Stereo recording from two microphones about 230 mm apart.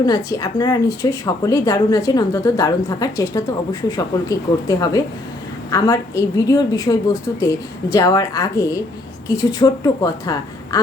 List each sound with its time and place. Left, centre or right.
0.0 s a woman's voice: centre